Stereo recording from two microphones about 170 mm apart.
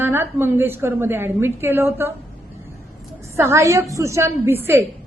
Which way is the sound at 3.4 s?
15° right (ahead or behind).